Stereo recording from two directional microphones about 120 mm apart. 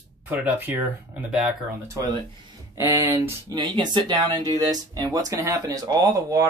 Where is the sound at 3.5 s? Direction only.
35° right (ahead or behind).